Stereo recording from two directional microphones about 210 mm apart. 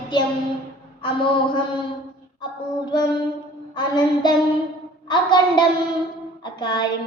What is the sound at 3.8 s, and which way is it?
Child singing, 20° left (ahead or behind).